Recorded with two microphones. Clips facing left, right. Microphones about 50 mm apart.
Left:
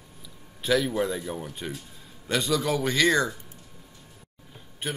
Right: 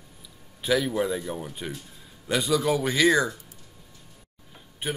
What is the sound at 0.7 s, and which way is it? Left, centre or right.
A woman's voice, centre.